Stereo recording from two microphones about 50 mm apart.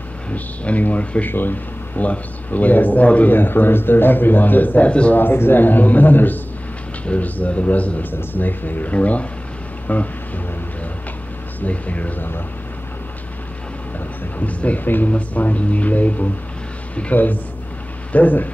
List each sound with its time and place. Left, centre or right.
0.3 s speech: left
5.1 s speech: left
8.1 s speech: left
11.6 s speech: left
14.4 s speech: left